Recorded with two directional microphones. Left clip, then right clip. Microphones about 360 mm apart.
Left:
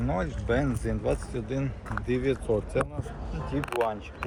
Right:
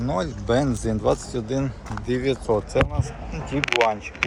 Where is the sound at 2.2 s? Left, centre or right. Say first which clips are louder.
Right 6 dB; centre.